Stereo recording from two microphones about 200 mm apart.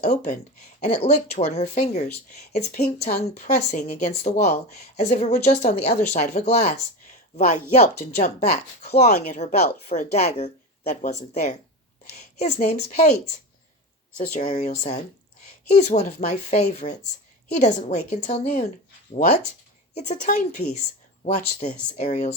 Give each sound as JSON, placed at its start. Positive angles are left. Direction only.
{"t": 0.0, "sound": "a woman's voice", "side_deg": 35}
{"t": 14.3, "sound": "speech", "side_deg": 35}
{"t": 19.9, "sound": "speech", "side_deg": 35}